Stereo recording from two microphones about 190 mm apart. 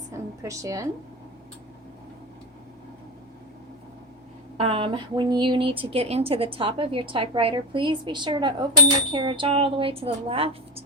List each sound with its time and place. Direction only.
0.1 s a woman's voice: 15° right (ahead or behind)
4.6 s a woman's voice: 30° right (ahead or behind)